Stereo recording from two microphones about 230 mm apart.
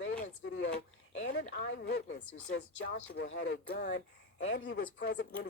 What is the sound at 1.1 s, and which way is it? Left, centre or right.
Speech, left.